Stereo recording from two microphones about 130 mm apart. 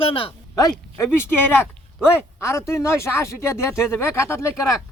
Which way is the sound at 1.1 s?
15° left (ahead or behind).